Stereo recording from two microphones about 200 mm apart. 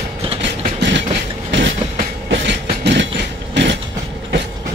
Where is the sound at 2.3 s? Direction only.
60° right (ahead or behind).